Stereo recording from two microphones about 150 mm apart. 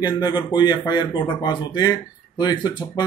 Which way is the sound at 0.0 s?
30° left (ahead or behind).